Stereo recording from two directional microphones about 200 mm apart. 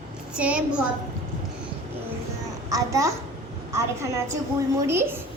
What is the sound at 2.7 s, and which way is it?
Speech, 15° right (ahead or behind).